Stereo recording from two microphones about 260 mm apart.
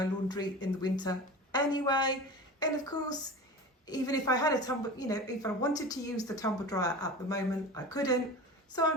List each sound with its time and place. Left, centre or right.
0.0 s a woman's voice: centre